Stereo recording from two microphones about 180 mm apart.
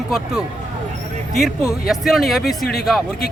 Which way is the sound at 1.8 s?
Centre (ahead or behind).